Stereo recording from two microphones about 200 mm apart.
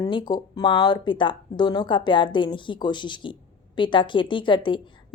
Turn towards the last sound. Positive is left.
turn(degrees=25)  # may be behind; listen again after turning